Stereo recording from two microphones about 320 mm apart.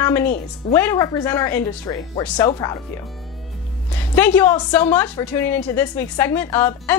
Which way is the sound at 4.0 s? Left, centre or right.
Centre.